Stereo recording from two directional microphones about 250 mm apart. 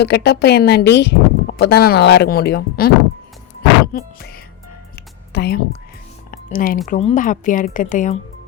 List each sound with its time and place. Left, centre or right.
0.0 s speech: left
3.9 s speech: left
6.3 s a sound: left
6.8 s speech: left